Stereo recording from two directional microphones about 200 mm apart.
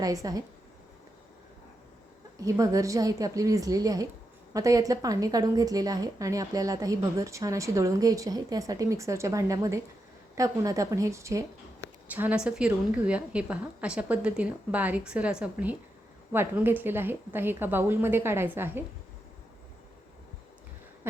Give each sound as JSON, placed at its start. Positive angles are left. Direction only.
{"t": 0.0, "sound": "speech", "side_deg": -15}
{"t": 2.4, "sound": "a woman's voice", "side_deg": -15}